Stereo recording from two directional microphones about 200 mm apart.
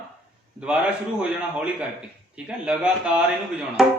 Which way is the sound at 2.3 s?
5° right (ahead or behind).